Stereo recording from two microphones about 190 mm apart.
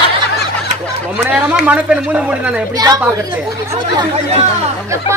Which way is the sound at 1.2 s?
10° right (ahead or behind).